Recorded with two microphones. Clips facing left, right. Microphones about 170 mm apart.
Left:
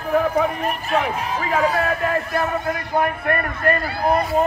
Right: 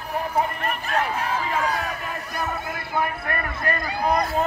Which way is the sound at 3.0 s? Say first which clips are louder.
Left 5 dB; 60° left (ahead or behind).